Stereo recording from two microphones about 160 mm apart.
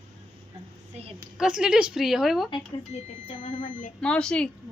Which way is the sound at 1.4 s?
5° right (ahead or behind).